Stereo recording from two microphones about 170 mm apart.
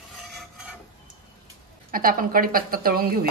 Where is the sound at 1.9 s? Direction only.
55° right (ahead or behind).